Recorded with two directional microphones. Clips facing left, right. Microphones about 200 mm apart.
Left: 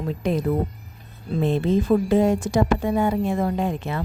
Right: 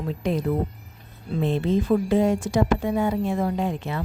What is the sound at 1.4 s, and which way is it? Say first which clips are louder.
Speech: left 2 dB; 45° left (ahead or behind).